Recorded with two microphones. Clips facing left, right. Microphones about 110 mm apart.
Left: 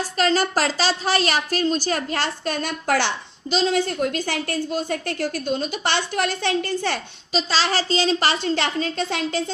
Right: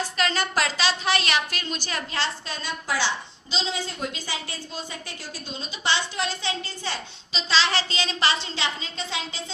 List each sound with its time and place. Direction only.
0.2 s a woman's voice: 40° left (ahead or behind)
8.4 s a woman's voice: 50° left (ahead or behind)